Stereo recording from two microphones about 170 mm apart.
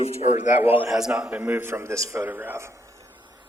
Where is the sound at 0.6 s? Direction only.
10° right (ahead or behind).